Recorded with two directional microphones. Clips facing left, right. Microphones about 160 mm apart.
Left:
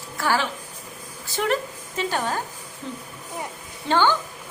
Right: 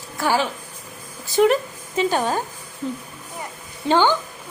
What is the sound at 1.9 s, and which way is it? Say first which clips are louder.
Speech: right 5 dB; 15° right (ahead or behind).